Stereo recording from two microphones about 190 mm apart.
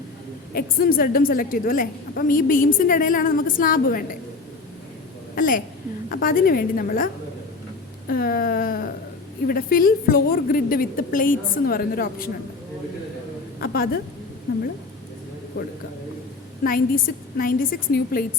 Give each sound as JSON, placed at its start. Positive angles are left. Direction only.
{"t": 0.5, "sound": "a woman's voice", "side_deg": 50}
{"t": 5.3, "sound": "a woman's voice", "side_deg": 45}
{"t": 8.1, "sound": "a woman's voice", "side_deg": 50}
{"t": 13.6, "sound": "a woman's voice", "side_deg": 50}
{"t": 16.6, "sound": "a woman's voice", "side_deg": 50}